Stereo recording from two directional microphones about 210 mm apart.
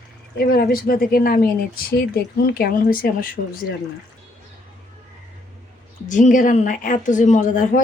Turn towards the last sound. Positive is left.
turn(degrees=40)  # may be behind; listen again after turning